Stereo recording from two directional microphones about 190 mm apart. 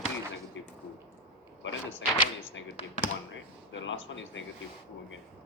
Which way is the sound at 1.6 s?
90° left.